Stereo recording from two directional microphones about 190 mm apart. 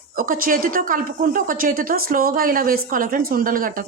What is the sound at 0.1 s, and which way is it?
A woman's voice, 45° right (ahead or behind).